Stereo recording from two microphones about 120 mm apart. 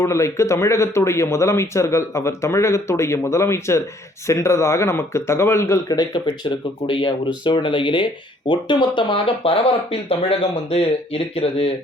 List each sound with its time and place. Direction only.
0.0 s speech: 25° left (ahead or behind); by 11.7 s 55° left (ahead or behind)